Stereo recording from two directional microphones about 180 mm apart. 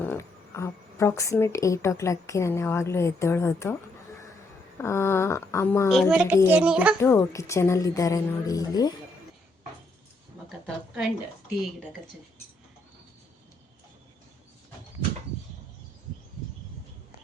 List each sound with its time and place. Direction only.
0.0 s a woman's voice: 15° left (ahead or behind)
4.8 s a woman's voice: 15° left (ahead or behind)
5.9 s a child's voice: centre (ahead or behind)
7.0 s a woman's voice: 15° left (ahead or behind)